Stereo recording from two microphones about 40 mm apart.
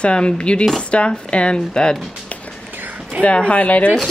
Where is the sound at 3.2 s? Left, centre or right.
Left.